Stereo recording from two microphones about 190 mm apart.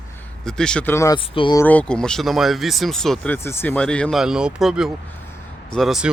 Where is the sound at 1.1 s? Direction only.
25° left (ahead or behind).